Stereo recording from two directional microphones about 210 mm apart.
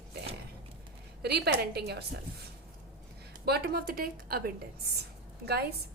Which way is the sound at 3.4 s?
50° right (ahead or behind).